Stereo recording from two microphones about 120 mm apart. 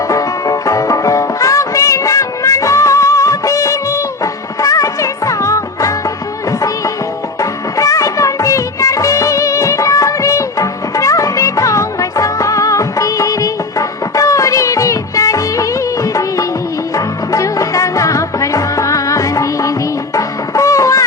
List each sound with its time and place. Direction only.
0.1 s music: 30° left (ahead or behind)
7.8 s music of bollywood: 25° left (ahead or behind)
16.9 s music: 25° left (ahead or behind)